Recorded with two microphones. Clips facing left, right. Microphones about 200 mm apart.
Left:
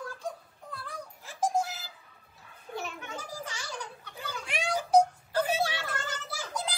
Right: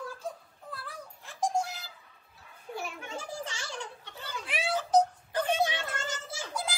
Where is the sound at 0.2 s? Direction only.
5° right (ahead or behind).